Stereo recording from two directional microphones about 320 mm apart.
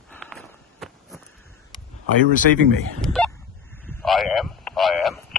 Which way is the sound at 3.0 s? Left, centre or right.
Centre.